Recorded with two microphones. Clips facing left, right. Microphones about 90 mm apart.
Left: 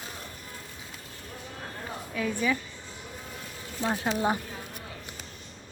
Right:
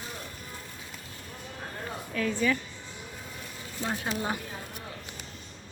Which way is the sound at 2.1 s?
10° left (ahead or behind).